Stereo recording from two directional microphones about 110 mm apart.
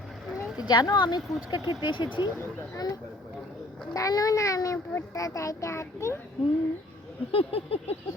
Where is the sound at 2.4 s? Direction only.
20° left (ahead or behind).